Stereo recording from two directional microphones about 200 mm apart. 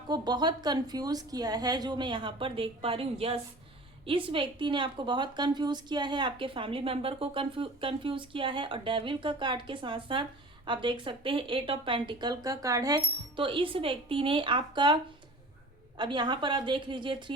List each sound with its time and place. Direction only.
0.1 s a woman's voice: 20° right (ahead or behind)
16.0 s a woman's voice: 25° right (ahead or behind)